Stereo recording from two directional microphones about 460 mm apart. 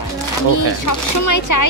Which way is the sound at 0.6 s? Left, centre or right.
Left.